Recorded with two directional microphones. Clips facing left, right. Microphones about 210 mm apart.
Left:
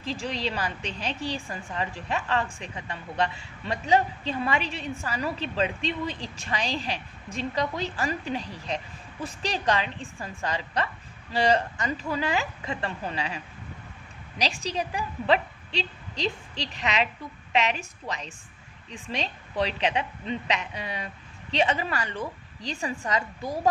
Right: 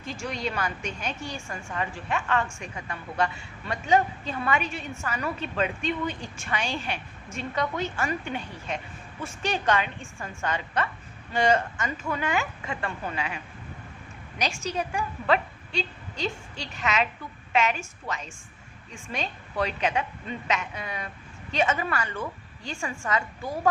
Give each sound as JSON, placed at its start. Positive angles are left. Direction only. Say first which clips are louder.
{"t": 0.0, "sound": "a woman's voice", "louder": "left 1 dB", "side_deg": 30}
{"t": 18.9, "sound": "a woman's voice", "louder": "left 1 dB", "side_deg": 35}